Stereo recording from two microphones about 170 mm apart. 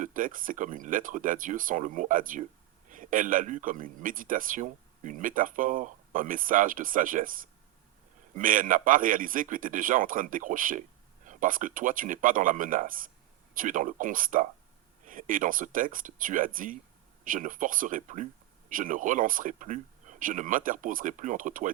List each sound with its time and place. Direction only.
0.0 s speech: 50° right (ahead or behind)